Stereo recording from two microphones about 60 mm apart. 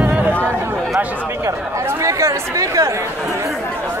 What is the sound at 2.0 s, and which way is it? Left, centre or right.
Speech, right.